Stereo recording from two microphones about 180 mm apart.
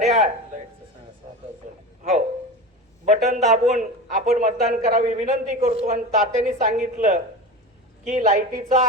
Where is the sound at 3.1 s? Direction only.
40° right (ahead or behind).